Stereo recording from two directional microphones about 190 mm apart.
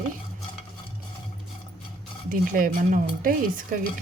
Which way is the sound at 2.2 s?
45° right (ahead or behind).